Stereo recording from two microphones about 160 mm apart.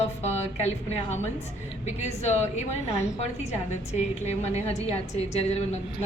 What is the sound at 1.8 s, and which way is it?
A woman's voice, 45° left (ahead or behind).